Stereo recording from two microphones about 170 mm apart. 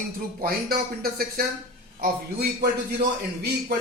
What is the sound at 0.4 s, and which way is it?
A man's voice, 65° right (ahead or behind).